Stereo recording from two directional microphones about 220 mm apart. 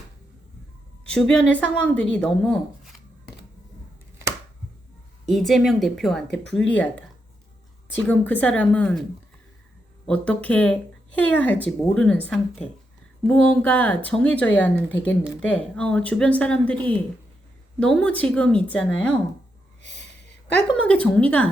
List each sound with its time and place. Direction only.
1.1 s speech: 5° left (ahead or behind)
5.2 s speech: centre (ahead or behind)
8.0 s speech: 5° left (ahead or behind)
10.1 s speech: 5° left (ahead or behind)
17.7 s speech: 5° left (ahead or behind)
19.8 s a sound: 50° left (ahead or behind)
20.8 s speech: 5° left (ahead or behind)